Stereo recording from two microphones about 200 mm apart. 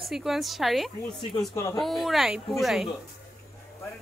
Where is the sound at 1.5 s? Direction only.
15° left (ahead or behind).